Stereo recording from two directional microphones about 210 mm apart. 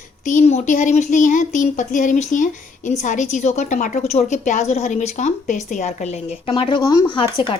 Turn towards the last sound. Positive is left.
turn(degrees=25)  # may be behind; listen again after turning